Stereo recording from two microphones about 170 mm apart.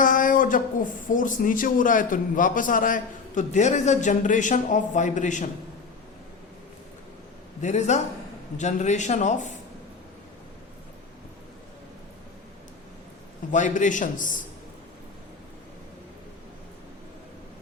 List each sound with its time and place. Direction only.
0.0 s speech: 50° left (ahead or behind)
7.6 s speech: 45° left (ahead or behind)
13.5 s speech: 45° left (ahead or behind)